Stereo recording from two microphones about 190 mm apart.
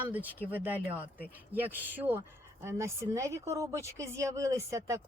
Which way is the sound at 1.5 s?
10° right (ahead or behind).